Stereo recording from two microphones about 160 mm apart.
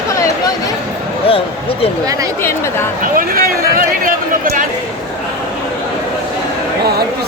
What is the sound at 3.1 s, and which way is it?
Speech, 60° right (ahead or behind).